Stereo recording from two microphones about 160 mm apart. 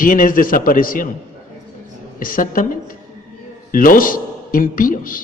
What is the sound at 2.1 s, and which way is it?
A man's voice, 60° left (ahead or behind).